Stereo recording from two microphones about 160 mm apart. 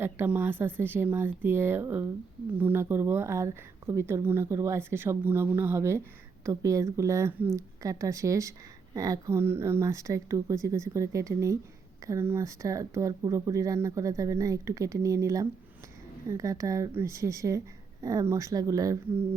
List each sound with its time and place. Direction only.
0.0 s a woman's voice: 15° right (ahead or behind)